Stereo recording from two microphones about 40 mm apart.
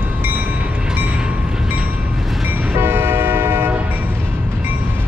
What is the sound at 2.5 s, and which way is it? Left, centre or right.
Train, right.